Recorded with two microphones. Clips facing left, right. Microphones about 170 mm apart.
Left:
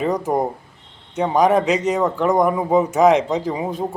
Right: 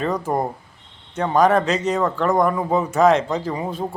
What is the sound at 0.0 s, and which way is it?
A man's voice, 15° left (ahead or behind).